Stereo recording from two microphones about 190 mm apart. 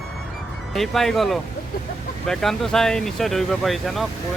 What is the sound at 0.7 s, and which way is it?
A man's voice, centre (ahead or behind).